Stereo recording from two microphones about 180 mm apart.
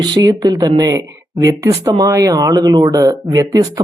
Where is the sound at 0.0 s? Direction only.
20° right (ahead or behind).